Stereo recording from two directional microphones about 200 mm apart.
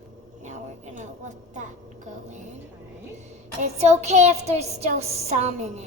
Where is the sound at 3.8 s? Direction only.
35° right (ahead or behind).